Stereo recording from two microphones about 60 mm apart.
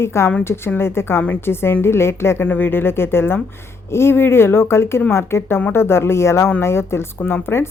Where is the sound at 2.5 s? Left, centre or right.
Left.